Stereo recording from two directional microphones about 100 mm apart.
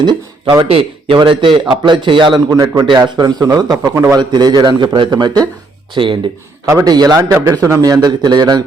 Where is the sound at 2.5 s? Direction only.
40° right (ahead or behind).